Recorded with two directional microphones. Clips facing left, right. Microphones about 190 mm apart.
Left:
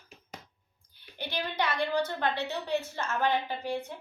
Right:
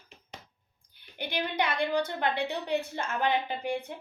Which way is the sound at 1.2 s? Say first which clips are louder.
Right 2 dB; 15° right (ahead or behind).